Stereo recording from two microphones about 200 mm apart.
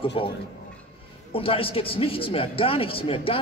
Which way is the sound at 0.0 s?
25° left (ahead or behind).